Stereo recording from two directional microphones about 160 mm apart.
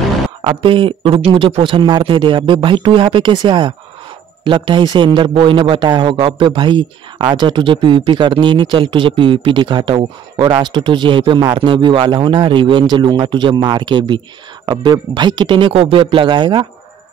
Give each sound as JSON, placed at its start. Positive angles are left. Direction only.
{"t": 0.4, "sound": "a man's voice", "side_deg": -35}